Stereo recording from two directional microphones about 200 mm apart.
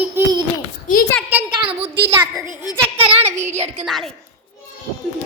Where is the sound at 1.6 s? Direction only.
30° right (ahead or behind).